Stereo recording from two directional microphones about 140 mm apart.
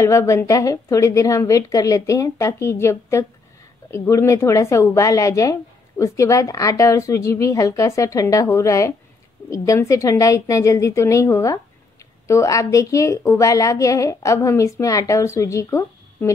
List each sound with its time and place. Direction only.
0.0 s a woman's voice: 20° left (ahead or behind)